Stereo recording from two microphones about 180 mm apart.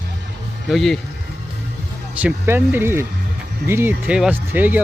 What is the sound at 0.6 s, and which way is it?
Speech, centre (ahead or behind).